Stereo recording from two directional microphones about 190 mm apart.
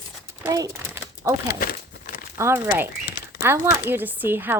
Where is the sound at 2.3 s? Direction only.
10° right (ahead or behind).